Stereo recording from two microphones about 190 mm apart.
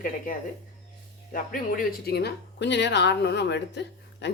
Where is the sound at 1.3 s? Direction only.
45° left (ahead or behind); by 4.3 s 65° left (ahead or behind).